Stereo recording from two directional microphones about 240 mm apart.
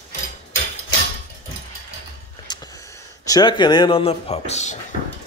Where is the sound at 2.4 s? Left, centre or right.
Centre.